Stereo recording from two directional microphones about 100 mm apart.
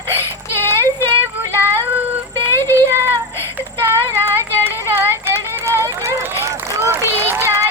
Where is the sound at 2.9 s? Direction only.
25° right (ahead or behind).